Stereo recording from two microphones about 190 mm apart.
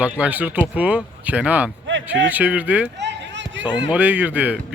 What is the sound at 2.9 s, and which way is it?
Run, 65° right (ahead or behind).